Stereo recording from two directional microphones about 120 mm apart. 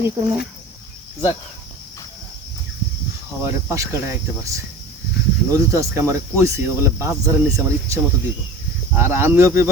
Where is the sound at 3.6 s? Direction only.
25° right (ahead or behind).